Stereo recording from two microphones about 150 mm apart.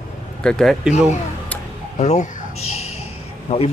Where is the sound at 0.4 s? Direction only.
5° left (ahead or behind).